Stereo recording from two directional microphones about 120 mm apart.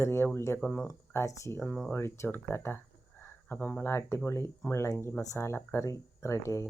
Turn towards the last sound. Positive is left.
turn(degrees=25)  # may be behind; listen again after turning